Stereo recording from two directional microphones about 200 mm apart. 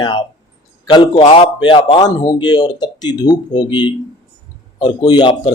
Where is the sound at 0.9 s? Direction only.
20° left (ahead or behind).